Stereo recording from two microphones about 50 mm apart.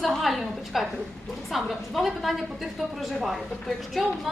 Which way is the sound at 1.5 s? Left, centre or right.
Centre.